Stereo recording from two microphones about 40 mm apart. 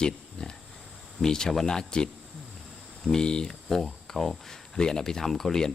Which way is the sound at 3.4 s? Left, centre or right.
Centre.